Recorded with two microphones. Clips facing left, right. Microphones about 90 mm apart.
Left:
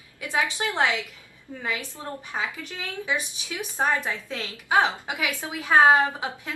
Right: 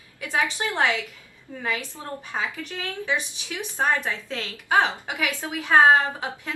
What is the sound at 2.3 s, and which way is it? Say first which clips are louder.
Speech: right 2 dB; 10° left (ahead or behind).